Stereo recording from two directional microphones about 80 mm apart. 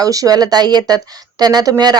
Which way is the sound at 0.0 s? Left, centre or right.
Right.